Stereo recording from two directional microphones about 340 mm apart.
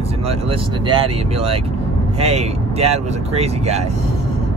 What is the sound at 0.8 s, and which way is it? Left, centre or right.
Speech, centre.